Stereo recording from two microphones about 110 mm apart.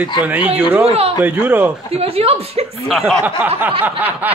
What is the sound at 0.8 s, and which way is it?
Speech, 65° right (ahead or behind).